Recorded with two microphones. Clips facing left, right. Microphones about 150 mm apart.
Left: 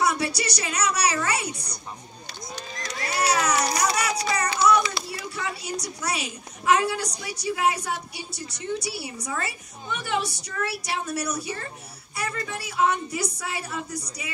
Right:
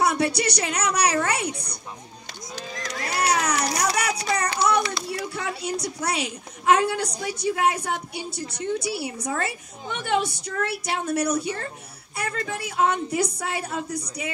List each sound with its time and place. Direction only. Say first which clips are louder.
0.0 s a woman's voice: right 3 dB; 60° right (ahead or behind)
3.0 s a sound: even; 60° right (ahead or behind)
5.1 s a woman's voice: right 3 dB; 60° right (ahead or behind)